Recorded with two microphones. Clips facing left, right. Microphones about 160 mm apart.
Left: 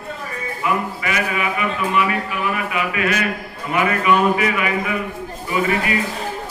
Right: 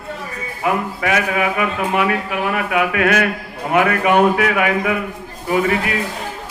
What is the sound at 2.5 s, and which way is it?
Speech, 65° right (ahead or behind).